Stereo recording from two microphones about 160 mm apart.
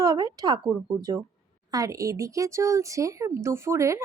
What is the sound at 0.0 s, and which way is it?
Speech, 20° right (ahead or behind).